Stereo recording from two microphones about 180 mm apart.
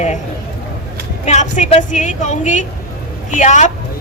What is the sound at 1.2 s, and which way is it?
A woman's voice, 40° left (ahead or behind).